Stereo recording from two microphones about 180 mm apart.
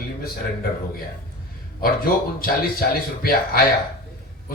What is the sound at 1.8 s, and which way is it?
Speech, 55° left (ahead or behind).